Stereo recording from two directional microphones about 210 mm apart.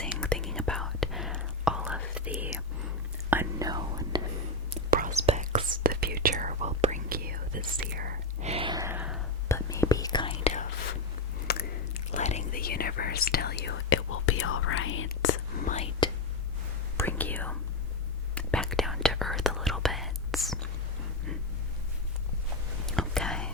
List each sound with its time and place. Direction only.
0.0 s whispering: 5° left (ahead or behind); by 4.2 s 20° right (ahead or behind)
4.9 s whispering: 40° right (ahead or behind)
7.1 s whispering: 45° right (ahead or behind)
8.4 s gasp: 25° right (ahead or behind); by 9.2 s 5° right (ahead or behind)
9.5 s whispering: 15° left (ahead or behind); by 10.7 s 30° left (ahead or behind)
11.5 s chewing: 50° left (ahead or behind)
12.1 s whispering: 35° left (ahead or behind); by 15.1 s 70° left (ahead or behind)
15.6 s whispering: 30° left (ahead or behind)
17.0 s whispering: 10° left (ahead or behind)
22.9 s whispering: 5° left (ahead or behind)